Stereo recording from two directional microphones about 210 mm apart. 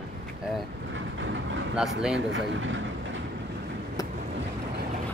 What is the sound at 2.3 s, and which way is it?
Speech, 65° right (ahead or behind).